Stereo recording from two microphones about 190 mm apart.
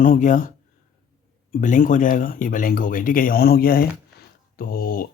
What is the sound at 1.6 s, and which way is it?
Speech, 40° left (ahead or behind).